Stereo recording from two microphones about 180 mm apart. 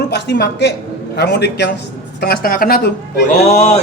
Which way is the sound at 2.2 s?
55° left (ahead or behind).